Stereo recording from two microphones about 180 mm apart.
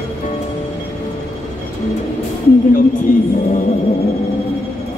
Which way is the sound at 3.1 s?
45° left (ahead or behind).